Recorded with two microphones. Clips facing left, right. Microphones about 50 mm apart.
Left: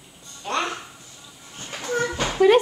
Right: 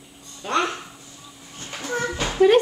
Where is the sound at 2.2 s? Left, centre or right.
Centre.